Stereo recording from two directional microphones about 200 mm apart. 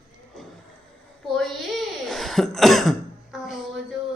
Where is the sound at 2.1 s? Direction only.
Centre (ahead or behind).